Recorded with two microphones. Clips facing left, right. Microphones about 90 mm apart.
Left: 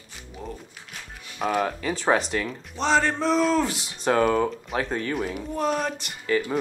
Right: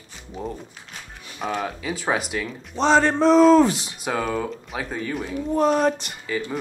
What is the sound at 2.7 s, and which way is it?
Speech, 30° right (ahead or behind).